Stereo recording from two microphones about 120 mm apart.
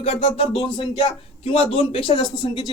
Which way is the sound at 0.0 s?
55° left (ahead or behind).